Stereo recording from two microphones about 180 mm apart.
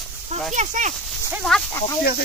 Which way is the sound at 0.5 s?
40° right (ahead or behind).